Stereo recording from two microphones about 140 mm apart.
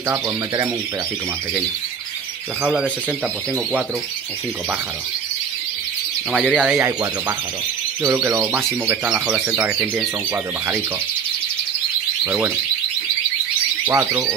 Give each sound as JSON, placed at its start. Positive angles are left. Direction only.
{"t": 2.6, "sound": "speech", "side_deg": -10}
{"t": 6.3, "sound": "speech", "side_deg": -10}
{"t": 6.8, "sound": "speech", "side_deg": -20}
{"t": 12.3, "sound": "speech", "side_deg": -10}
{"t": 13.8, "sound": "speech", "side_deg": -20}